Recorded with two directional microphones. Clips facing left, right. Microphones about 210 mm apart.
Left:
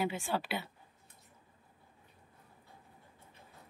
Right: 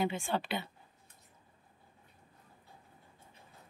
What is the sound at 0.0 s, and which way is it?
Speech, 5° left (ahead or behind).